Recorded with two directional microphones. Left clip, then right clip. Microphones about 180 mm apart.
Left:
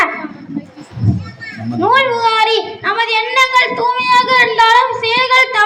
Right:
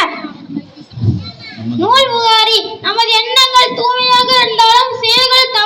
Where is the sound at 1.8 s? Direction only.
15° left (ahead or behind).